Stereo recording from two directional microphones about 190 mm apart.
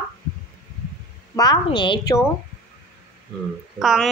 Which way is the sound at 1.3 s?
20° left (ahead or behind).